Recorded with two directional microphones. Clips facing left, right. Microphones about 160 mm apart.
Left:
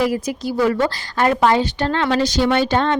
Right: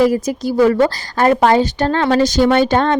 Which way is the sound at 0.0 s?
45° right (ahead or behind).